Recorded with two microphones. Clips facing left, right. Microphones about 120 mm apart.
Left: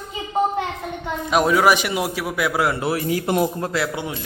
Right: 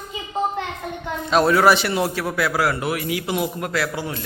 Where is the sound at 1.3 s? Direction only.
15° left (ahead or behind); by 3.5 s 45° left (ahead or behind).